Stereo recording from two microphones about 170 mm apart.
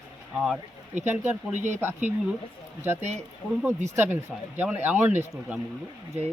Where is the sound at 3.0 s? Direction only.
40° right (ahead or behind).